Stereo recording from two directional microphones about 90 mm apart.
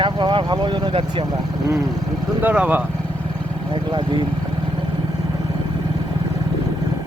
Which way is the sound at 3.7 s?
60° right (ahead or behind).